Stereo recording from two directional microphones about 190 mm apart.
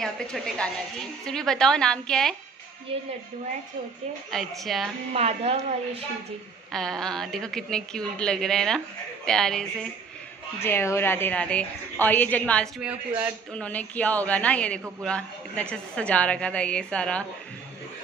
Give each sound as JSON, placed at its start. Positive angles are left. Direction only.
{"t": 0.0, "sound": "a woman's voice", "side_deg": 5}
{"t": 2.9, "sound": "a woman's voice", "side_deg": -30}
{"t": 4.3, "sound": "a woman's voice", "side_deg": 0}
{"t": 5.1, "sound": "a woman's voice", "side_deg": -30}
{"t": 6.7, "sound": "a woman's voice", "side_deg": 5}